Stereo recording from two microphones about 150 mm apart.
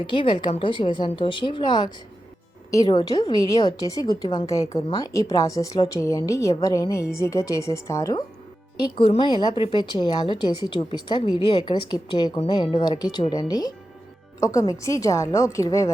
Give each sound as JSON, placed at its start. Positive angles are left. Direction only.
{"t": 0.0, "sound": "a woman's voice", "side_deg": 35}